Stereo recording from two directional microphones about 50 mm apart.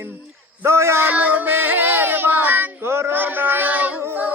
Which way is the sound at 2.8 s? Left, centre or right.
Right.